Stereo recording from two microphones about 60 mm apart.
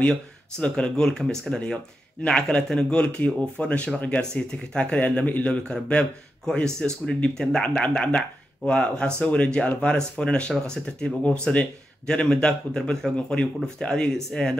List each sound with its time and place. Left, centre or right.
0.0 s speech: centre